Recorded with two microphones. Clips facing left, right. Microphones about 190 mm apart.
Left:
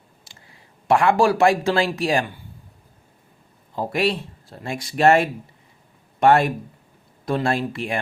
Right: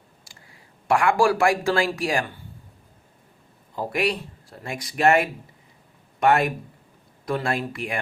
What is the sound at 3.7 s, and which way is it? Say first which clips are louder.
Speech: left 3 dB; 25° left (ahead or behind).